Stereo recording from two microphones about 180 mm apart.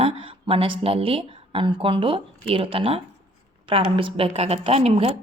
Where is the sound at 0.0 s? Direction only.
30° right (ahead or behind).